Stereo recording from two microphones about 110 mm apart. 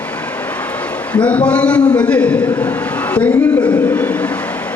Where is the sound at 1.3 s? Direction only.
10° left (ahead or behind).